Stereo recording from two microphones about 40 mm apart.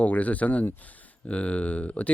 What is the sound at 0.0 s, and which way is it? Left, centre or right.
Speech, left.